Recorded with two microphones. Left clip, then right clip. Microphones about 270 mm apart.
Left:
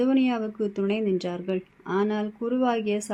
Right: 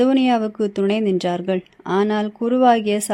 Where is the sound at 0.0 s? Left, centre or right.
Right.